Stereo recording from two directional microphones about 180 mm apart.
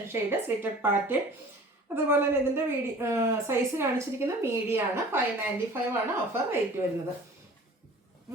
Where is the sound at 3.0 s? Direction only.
15° right (ahead or behind).